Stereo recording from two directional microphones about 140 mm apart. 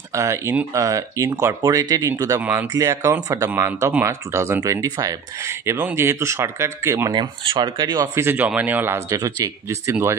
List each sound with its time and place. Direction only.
0.1 s speech: 20° right (ahead or behind)
7.2 s speech: 35° right (ahead or behind); by 10.1 s 20° right (ahead or behind)